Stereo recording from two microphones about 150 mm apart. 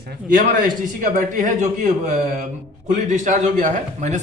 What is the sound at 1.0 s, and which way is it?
A man's voice, 60° right (ahead or behind).